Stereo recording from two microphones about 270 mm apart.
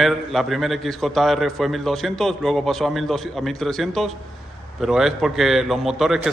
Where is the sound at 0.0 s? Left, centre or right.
Centre.